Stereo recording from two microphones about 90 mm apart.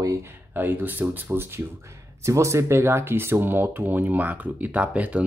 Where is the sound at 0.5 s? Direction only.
20° right (ahead or behind).